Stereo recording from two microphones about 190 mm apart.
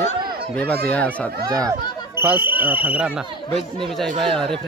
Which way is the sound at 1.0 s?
20° right (ahead or behind).